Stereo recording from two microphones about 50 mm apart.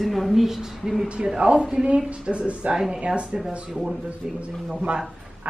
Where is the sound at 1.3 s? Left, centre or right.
Centre.